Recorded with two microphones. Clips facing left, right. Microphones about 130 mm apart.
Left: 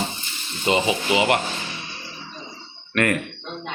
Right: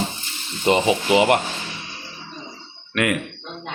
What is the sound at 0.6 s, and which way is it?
Speech, 50° right (ahead or behind).